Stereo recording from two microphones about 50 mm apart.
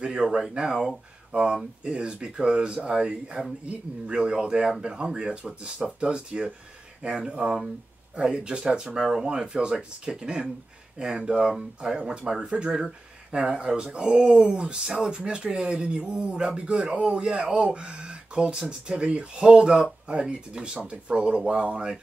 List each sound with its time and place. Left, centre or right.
0.0 s speech: centre